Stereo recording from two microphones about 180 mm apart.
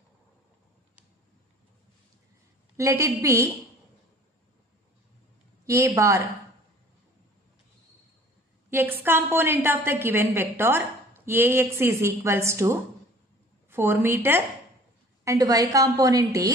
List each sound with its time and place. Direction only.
2.8 s a woman's voice: 15° right (ahead or behind)
5.7 s a woman's voice: 15° right (ahead or behind)
8.6 s a woman's voice: 10° right (ahead or behind)